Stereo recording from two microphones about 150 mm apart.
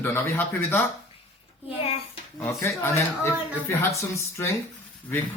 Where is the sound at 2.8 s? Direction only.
15° left (ahead or behind).